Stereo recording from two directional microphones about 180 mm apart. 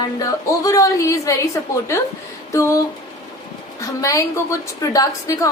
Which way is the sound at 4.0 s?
15° left (ahead or behind).